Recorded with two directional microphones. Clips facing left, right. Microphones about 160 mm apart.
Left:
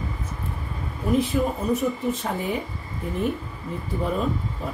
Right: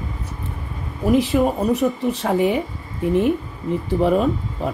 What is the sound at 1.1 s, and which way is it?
Speech, 80° right.